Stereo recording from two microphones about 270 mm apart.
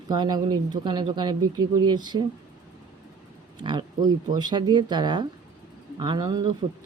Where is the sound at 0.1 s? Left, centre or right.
Centre.